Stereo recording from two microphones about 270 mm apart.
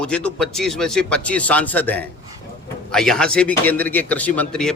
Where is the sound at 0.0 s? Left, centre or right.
Centre.